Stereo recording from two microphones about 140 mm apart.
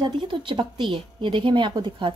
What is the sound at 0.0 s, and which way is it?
Speech, 35° right (ahead or behind).